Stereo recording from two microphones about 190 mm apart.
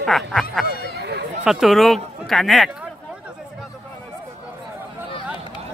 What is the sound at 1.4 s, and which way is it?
Speech, centre (ahead or behind).